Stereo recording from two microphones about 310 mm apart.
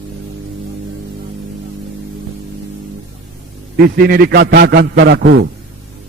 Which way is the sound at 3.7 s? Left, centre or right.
Right.